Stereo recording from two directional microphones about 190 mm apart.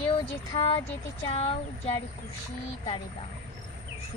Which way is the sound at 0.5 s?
30° left (ahead or behind).